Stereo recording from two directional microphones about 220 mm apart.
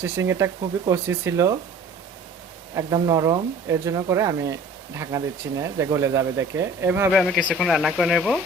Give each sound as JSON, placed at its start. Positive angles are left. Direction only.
{"t": 0.0, "sound": "speech", "side_deg": -10}
{"t": 2.7, "sound": "speech", "side_deg": -15}
{"t": 7.1, "sound": "speech", "side_deg": 0}